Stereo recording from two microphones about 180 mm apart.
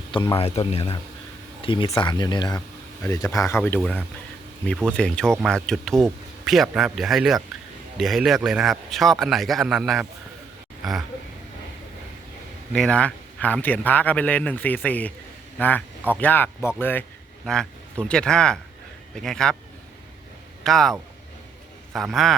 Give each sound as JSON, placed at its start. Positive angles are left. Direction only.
{"t": 0.1, "sound": "speech", "side_deg": 25}
{"t": 12.7, "sound": "a man's voice", "side_deg": 5}
{"t": 20.7, "sound": "speech", "side_deg": 0}
{"t": 21.9, "sound": "speech", "side_deg": 0}